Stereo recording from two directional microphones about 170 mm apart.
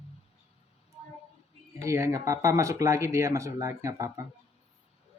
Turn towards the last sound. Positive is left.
turn(degrees=-20)  # may be behind; listen again after turning